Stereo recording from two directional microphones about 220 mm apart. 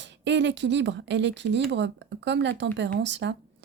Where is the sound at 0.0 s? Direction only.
55° right (ahead or behind).